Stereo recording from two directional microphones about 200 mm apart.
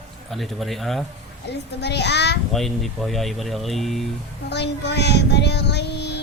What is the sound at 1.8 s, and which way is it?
Child singing, 55° left (ahead or behind).